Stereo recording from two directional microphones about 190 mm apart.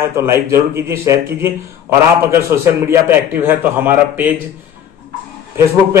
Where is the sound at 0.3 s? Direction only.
15° right (ahead or behind).